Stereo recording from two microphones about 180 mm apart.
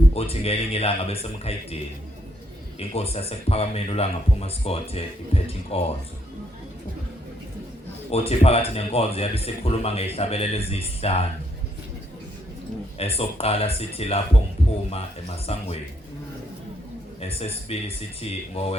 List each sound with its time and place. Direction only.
0.1 s speech: 35° left (ahead or behind)
8.1 s speech: 35° left (ahead or behind)
13.0 s speech: 35° left (ahead or behind)
14.6 s a sound: 35° left (ahead or behind)
15.5 s speech: 35° left (ahead or behind)
17.2 s speech: 35° left (ahead or behind)